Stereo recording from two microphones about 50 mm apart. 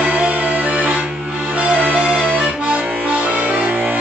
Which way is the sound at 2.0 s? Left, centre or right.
Right.